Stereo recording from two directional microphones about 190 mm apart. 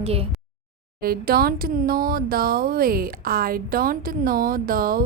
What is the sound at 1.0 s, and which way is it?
A woman's voice, 50° right (ahead or behind).